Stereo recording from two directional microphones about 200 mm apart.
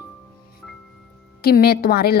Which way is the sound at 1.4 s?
50° left (ahead or behind).